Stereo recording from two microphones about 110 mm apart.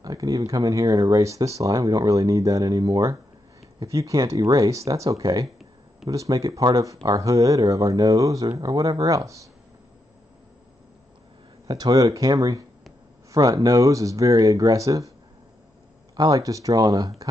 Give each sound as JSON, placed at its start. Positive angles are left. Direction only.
{"t": 0.0, "sound": "speech", "side_deg": -35}
{"t": 11.6, "sound": "speech", "side_deg": -35}
{"t": 16.2, "sound": "speech", "side_deg": -30}